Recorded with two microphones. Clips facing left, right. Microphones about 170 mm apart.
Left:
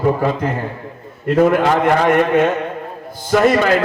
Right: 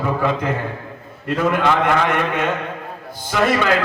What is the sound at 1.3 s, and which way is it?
A man's voice, 40° left (ahead or behind).